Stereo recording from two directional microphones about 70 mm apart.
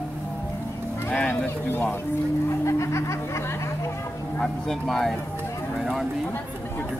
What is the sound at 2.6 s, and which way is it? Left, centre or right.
Music, left.